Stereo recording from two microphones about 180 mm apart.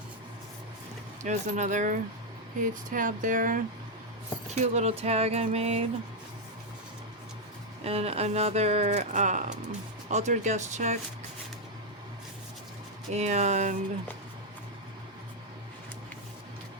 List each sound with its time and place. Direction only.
1.2 s speech: 40° right (ahead or behind)
4.6 s speech: 40° right (ahead or behind)
7.9 s speech: 35° right (ahead or behind)
13.1 s speech: 40° right (ahead or behind)